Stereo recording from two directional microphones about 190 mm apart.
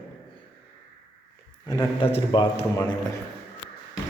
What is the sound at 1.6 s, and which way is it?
A man's voice, 20° left (ahead or behind).